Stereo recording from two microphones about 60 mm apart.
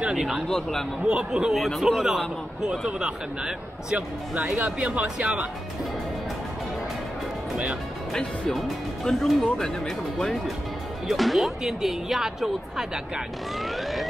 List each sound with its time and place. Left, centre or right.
0.0 s a man's voice: centre
0.5 s speech: centre
1.0 s a man's voice: centre
1.5 s a man's voice: centre; by 5.4 s right
8.1 s a man's voice: centre